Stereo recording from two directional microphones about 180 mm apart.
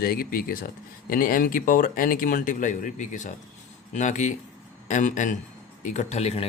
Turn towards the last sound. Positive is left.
turn(degrees=35)  # may be behind; listen again after turning